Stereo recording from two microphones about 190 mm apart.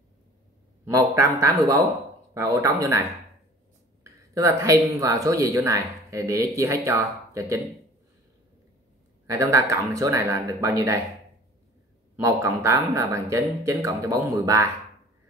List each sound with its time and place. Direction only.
1.2 s speech: 15° right (ahead or behind)
9.3 s speech: 15° right (ahead or behind)
12.2 s speech: 15° right (ahead or behind)